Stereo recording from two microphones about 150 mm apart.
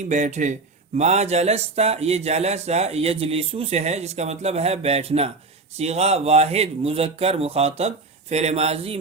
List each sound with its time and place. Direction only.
0.1 s speech: 55° right (ahead or behind)